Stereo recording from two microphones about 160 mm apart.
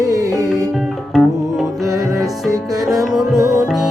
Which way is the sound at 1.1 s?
Centre (ahead or behind).